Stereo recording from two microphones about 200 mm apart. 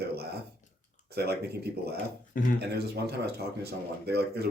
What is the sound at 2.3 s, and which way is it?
Speech, 45° left (ahead or behind).